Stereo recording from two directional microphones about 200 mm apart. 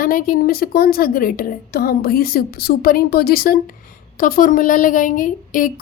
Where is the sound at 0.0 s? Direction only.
45° left (ahead or behind).